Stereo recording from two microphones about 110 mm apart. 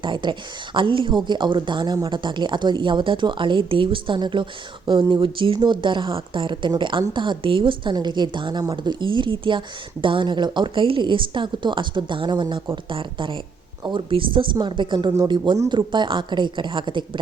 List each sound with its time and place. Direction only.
0.0 s a woman's voice: 45° right (ahead or behind)